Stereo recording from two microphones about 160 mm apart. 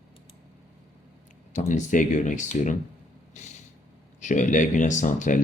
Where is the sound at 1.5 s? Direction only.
50° left (ahead or behind).